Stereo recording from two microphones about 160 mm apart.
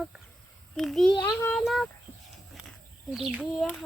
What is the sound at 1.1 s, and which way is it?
Speech, 25° left (ahead or behind).